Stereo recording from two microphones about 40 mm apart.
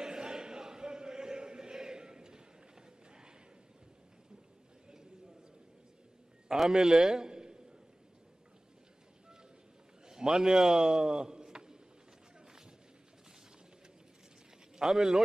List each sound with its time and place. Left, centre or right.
0.0 s chant: centre
6.5 s a man's voice: centre
10.0 s a man's voice: centre
14.8 s speech: centre